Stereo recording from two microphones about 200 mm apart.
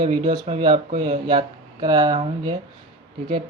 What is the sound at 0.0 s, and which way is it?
Speech, 20° right (ahead or behind).